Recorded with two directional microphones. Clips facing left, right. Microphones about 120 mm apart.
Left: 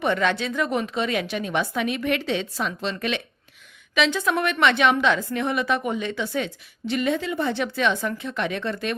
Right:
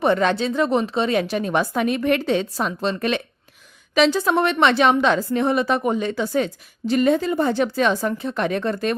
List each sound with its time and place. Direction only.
0.0 s a woman's voice: 35° right (ahead or behind)